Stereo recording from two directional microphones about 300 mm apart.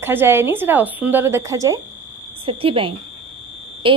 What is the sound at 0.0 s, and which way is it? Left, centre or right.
Speech, centre.